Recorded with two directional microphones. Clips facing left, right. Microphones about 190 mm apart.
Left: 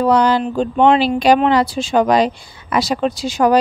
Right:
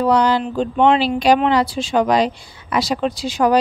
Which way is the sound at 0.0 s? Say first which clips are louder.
Left 2 dB; 50° left (ahead or behind).